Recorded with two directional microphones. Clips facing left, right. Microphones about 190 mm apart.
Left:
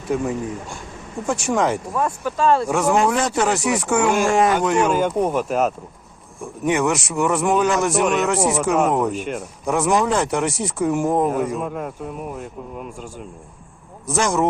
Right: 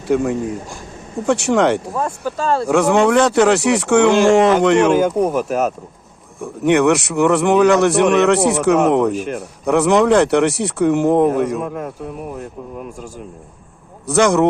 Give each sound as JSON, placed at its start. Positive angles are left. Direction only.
{"t": 0.1, "sound": "a man's voice", "side_deg": -75}
{"t": 1.9, "sound": "speech", "side_deg": -35}
{"t": 2.6, "sound": "a man's voice", "side_deg": -70}
{"t": 5.0, "sound": "speech", "side_deg": -45}
{"t": 6.4, "sound": "a man's voice", "side_deg": -70}
{"t": 14.1, "sound": "a man's voice", "side_deg": -70}